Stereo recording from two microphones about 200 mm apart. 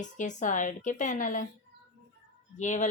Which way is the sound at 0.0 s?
40° left (ahead or behind).